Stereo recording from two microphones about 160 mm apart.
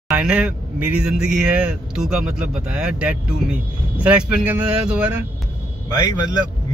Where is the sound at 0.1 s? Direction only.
10° right (ahead or behind).